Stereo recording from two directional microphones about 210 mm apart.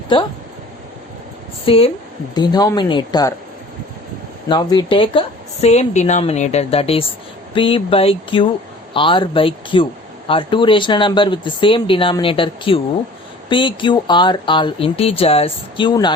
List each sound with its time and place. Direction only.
1.6 s a woman's voice: 25° left (ahead or behind)
4.4 s a woman's voice: 20° left (ahead or behind)